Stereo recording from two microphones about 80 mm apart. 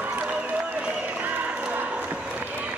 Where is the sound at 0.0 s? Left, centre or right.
Centre.